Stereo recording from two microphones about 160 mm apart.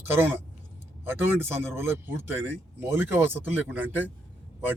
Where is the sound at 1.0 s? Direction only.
15° right (ahead or behind).